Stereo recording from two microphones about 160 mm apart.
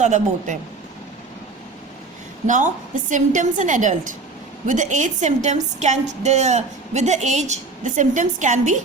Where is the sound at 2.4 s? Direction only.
50° right (ahead or behind).